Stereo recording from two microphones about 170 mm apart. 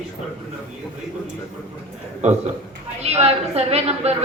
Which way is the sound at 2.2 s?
40° right (ahead or behind).